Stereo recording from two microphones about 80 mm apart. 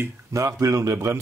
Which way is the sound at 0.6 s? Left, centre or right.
Right.